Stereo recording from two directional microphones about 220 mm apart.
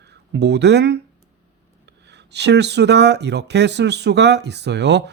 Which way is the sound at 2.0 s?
50° right (ahead or behind).